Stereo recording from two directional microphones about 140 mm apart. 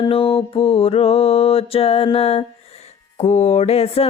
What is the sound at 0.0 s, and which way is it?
Mantra, 40° left (ahead or behind).